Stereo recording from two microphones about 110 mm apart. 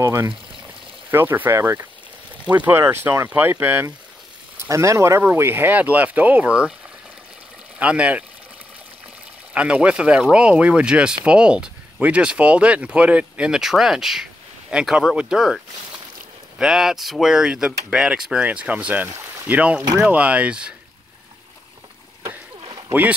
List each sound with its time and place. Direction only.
0.0 s speech: 25° right (ahead or behind)
7.8 s speech: 10° right (ahead or behind)
9.5 s speech: 10° right (ahead or behind)
22.7 s a sound: 35° right (ahead or behind)